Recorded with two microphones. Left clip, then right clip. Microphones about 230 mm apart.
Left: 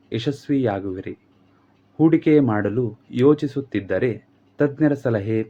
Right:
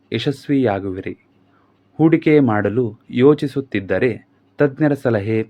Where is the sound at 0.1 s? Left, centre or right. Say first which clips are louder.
Right 4 dB; right.